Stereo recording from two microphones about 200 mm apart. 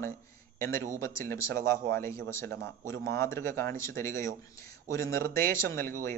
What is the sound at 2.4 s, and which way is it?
Speech, 55° right (ahead or behind).